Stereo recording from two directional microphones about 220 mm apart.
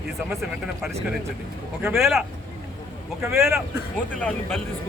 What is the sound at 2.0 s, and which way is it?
Speech, centre (ahead or behind).